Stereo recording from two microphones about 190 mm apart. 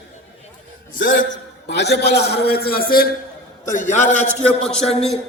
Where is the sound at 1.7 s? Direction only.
65° left (ahead or behind).